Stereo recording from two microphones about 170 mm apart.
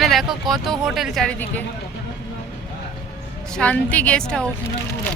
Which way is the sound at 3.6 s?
5° left (ahead or behind).